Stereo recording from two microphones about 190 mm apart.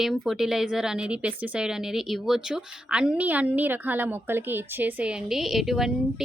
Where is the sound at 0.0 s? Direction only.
Centre (ahead or behind).